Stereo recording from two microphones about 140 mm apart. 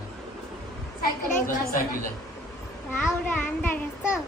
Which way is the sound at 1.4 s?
80° left.